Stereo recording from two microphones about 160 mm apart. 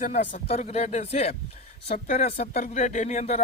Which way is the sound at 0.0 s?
50° left (ahead or behind).